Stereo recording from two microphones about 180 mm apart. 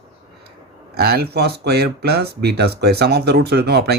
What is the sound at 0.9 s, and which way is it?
Speech, 65° right (ahead or behind).